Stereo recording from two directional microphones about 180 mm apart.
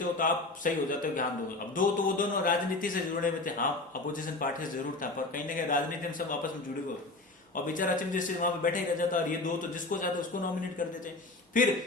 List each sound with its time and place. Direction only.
0.2 s speech: 50° left (ahead or behind)
5.3 s speech: 50° left (ahead or behind)
7.5 s speech: 50° left (ahead or behind)
11.6 s speech: 50° left (ahead or behind)